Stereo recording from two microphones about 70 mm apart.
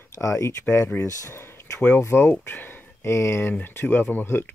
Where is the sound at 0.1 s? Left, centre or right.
Left.